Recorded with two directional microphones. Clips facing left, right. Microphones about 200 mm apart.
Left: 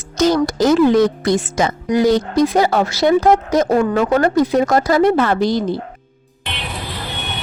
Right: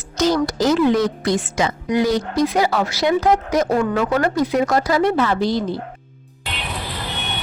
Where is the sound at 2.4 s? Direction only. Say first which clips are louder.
Left 2 dB; 45° left (ahead or behind).